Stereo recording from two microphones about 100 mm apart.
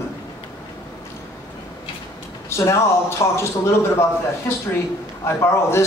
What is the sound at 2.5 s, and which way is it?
Speech, 30° left (ahead or behind).